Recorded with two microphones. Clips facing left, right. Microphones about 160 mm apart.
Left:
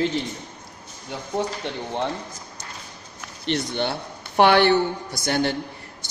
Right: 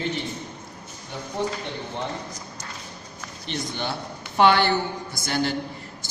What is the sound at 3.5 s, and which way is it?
A man's voice, 60° left (ahead or behind).